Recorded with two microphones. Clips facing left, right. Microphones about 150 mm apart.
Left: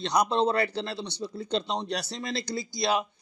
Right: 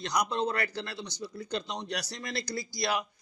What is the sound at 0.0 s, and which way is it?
Speech, 30° left (ahead or behind).